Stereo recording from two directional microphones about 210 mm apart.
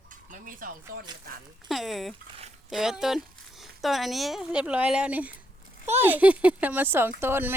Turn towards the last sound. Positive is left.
turn(degrees=-10)  # may be behind; listen again after turning